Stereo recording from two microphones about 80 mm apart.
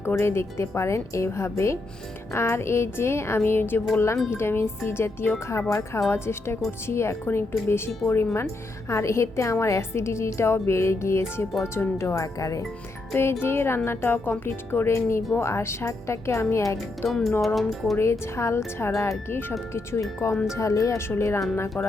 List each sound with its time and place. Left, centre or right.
0.0 s a woman's voice: left
13.4 s a woman's voice: left
17.1 s speech: centre
17.9 s a woman's voice: left